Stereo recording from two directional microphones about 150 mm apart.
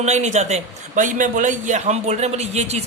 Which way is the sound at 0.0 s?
50° right (ahead or behind).